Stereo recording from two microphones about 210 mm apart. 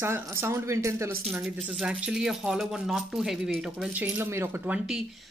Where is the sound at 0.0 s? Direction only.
10° right (ahead or behind).